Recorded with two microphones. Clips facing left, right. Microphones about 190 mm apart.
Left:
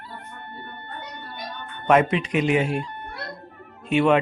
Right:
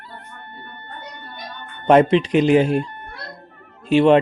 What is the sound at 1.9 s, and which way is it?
Speech, 30° right (ahead or behind).